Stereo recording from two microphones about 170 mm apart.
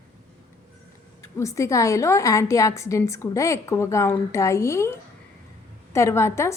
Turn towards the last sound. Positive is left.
turn(degrees=15)  # may be behind; listen again after turning